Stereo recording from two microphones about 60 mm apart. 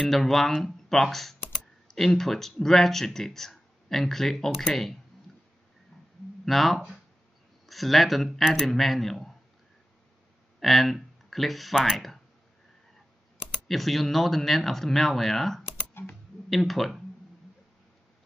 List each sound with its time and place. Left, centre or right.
0.1 s speech: centre
6.4 s speech: centre
10.6 s speech: centre
13.7 s speech: centre
15.9 s typing: left
16.4 s speech: centre